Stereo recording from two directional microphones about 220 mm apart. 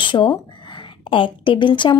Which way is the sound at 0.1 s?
20° left (ahead or behind).